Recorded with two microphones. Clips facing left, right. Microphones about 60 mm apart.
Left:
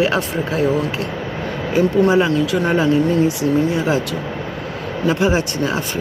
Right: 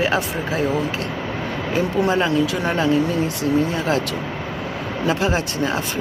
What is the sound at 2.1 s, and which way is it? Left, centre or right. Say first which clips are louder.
Speech: left 3 dB; centre.